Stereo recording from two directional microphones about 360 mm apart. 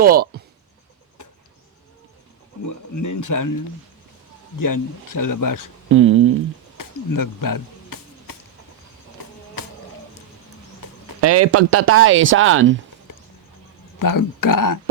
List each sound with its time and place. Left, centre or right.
0.0 s speech: right
2.6 s speech: left
4.6 s speech: left
5.9 s speech: right
6.7 s a sound: left
9.2 s music: left
9.6 s a sound: left
10.8 s a sound: left
11.2 s speech: right
14.0 s speech: left